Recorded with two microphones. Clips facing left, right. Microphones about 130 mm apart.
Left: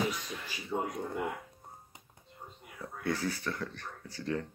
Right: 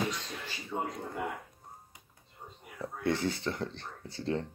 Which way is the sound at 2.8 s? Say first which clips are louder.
Right 3 dB; 25° right (ahead or behind).